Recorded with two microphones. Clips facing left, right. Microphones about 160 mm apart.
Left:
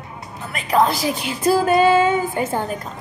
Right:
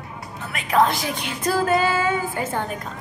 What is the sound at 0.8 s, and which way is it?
Speech, 35° left (ahead or behind).